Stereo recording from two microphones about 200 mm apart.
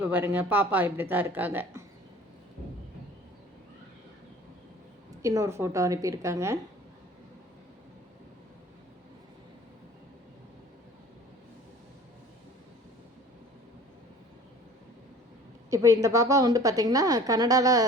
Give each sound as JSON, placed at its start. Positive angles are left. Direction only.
{"t": 0.0, "sound": "a woman's voice", "side_deg": -10}
{"t": 5.2, "sound": "a woman's voice", "side_deg": -15}
{"t": 15.7, "sound": "a woman's voice", "side_deg": -15}